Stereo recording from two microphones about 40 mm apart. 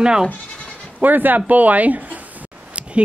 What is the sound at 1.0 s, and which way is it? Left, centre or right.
Speech, right.